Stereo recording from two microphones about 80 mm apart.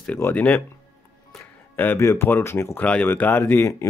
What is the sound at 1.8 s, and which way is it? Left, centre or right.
Speech, left.